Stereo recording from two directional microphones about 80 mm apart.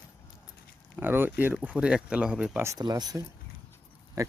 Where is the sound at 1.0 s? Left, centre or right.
Right.